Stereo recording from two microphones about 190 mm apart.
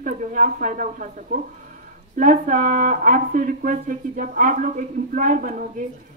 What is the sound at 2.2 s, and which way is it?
Speech, 45° right (ahead or behind).